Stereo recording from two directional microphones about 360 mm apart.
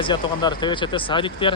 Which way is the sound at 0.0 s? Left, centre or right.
Centre.